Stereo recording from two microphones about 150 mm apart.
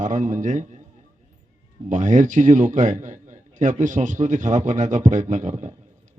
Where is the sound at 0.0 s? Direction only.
60° right (ahead or behind).